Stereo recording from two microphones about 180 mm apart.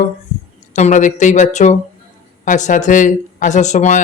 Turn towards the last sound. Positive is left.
turn(degrees=40)  # may be behind; listen again after turning